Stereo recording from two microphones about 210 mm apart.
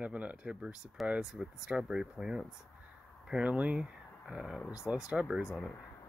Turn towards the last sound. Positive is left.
turn(degrees=-5)  # may be behind; listen again after turning